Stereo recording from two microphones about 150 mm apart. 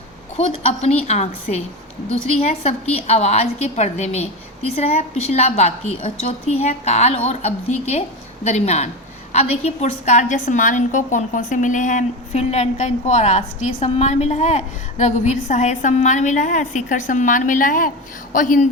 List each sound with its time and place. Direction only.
0.3 s a woman's voice: 45° left (ahead or behind)